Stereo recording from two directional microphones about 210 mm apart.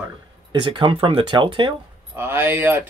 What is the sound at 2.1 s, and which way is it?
Speech, 10° right (ahead or behind).